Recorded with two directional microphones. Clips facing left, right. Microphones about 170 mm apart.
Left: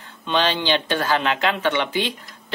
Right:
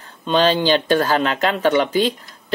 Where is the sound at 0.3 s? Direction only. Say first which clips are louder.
Right 5 dB; 40° right (ahead or behind).